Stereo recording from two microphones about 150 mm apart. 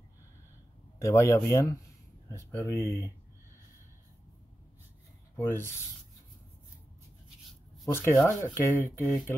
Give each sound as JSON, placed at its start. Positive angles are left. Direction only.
{"t": 1.0, "sound": "speech", "side_deg": 20}
{"t": 5.3, "sound": "rub", "side_deg": 15}
{"t": 7.8, "sound": "speech", "side_deg": 20}